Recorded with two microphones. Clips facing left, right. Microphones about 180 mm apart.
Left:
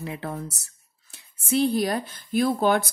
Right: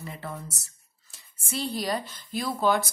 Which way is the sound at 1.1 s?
60° left (ahead or behind).